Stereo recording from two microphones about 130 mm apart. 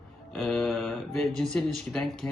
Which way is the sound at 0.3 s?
Centre (ahead or behind).